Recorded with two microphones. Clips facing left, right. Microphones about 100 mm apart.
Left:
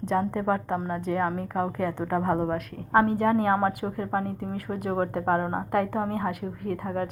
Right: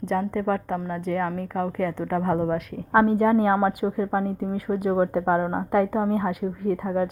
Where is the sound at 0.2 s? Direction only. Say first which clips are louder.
Right 1 dB; 25° left (ahead or behind).